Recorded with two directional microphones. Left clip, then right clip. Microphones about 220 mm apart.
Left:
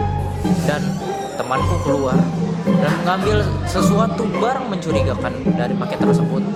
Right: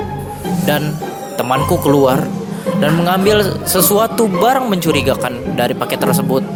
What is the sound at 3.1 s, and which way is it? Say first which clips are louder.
Speech: right 6 dB; 35° right (ahead or behind).